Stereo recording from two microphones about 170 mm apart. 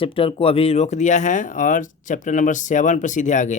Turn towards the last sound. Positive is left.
turn(degrees=45)  # may be behind; listen again after turning